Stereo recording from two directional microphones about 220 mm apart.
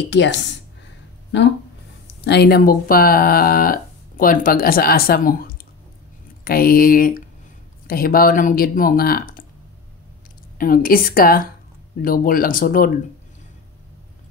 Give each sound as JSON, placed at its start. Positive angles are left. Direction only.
{"t": 0.1, "sound": "speech", "side_deg": 55}
{"t": 2.2, "sound": "speech", "side_deg": 50}
{"t": 10.6, "sound": "speech", "side_deg": 40}